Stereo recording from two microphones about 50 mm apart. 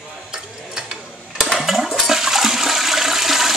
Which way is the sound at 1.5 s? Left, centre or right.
Centre.